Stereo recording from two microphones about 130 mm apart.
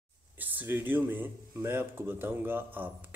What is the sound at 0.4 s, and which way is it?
Speech, 15° right (ahead or behind).